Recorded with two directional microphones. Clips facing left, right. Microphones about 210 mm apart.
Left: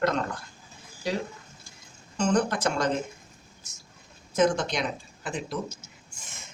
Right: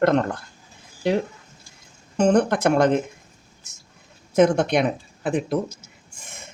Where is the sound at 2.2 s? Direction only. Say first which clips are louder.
Right 7 dB; 60° right (ahead or behind).